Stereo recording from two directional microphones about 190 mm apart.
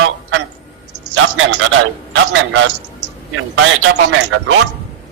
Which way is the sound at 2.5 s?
85° right.